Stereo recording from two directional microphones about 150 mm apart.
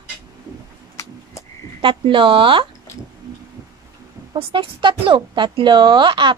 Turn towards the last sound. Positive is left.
turn(degrees=-30)  # may be behind; listen again after turning